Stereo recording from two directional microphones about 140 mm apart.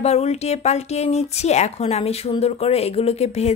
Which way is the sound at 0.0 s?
50° left (ahead or behind).